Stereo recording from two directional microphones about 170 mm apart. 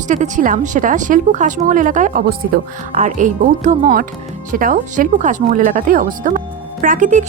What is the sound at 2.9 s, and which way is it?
A woman's voice, 45° right (ahead or behind).